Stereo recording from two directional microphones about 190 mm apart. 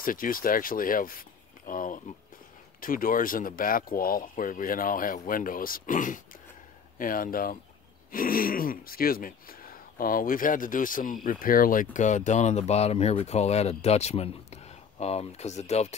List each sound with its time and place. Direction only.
0.0 s speech: 45° left (ahead or behind)